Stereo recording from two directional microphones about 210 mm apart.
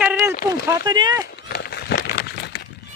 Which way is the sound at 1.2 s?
50° left (ahead or behind).